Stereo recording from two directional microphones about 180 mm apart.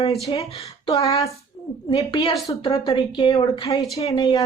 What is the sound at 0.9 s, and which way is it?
Speech, 20° left (ahead or behind).